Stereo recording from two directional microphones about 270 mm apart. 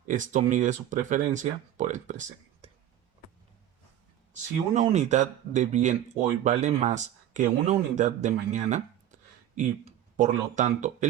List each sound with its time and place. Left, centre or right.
0.0 s speech: right
4.7 s speech: right